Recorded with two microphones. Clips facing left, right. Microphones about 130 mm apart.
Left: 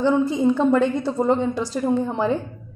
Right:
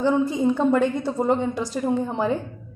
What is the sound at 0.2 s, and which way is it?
Speech, 25° left (ahead or behind).